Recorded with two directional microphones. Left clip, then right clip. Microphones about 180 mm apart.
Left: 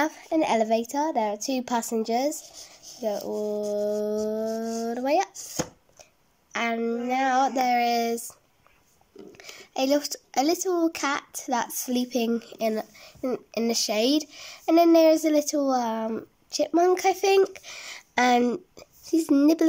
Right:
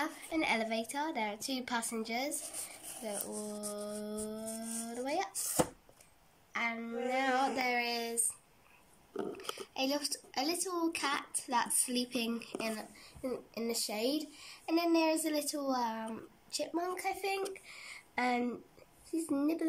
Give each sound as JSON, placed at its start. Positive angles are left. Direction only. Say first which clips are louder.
{"t": 0.0, "sound": "a woman's voice", "louder": "left 11 dB", "side_deg": 45}
{"t": 6.5, "sound": "speech", "louder": "left 10 dB", "side_deg": 50}
{"t": 9.4, "sound": "speech", "louder": "left 12 dB", "side_deg": 50}